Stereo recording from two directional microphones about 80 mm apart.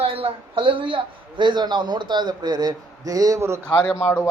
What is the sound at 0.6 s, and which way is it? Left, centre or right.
Speech, right.